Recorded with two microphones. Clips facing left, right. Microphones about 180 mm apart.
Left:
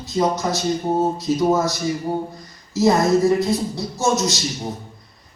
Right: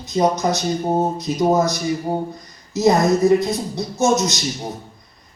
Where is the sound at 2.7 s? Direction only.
20° right (ahead or behind).